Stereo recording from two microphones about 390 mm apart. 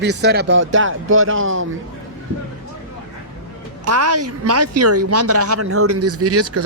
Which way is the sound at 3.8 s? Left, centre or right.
Right.